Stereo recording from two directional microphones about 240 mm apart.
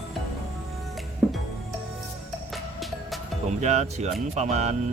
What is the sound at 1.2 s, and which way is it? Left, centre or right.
Music, centre.